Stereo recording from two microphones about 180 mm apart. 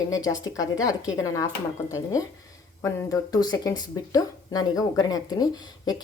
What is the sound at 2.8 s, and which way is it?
Speech, 20° left (ahead or behind).